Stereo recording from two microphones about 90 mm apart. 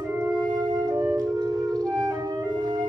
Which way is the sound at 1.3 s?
40° right (ahead or behind).